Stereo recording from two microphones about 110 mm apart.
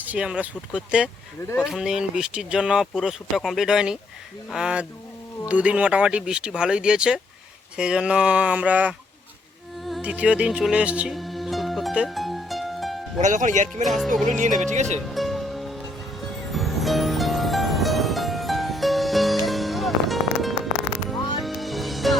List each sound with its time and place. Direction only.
0.0 s speech: 10° right (ahead or behind)
10.0 s speech: 10° right (ahead or behind)
11.1 s music: centre (ahead or behind)
13.1 s speech: 90° right
13.8 s speech: centre (ahead or behind)
14.3 s speech: 90° right
15.0 s music: centre (ahead or behind)